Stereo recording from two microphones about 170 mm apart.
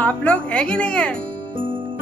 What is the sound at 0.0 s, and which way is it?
Speech, 10° left (ahead or behind).